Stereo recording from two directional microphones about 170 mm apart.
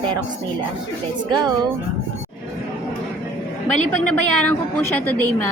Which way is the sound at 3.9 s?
10° left (ahead or behind).